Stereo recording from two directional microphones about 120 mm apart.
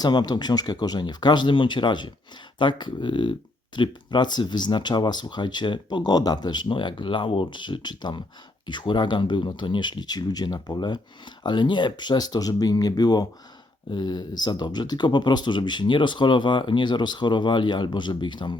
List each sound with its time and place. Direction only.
0.0 s speech: 35° left (ahead or behind)